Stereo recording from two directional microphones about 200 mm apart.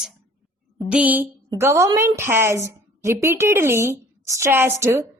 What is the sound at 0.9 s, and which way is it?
A woman's voice, 5° right (ahead or behind).